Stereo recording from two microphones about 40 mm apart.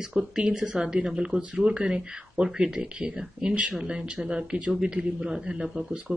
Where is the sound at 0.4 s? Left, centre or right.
Right.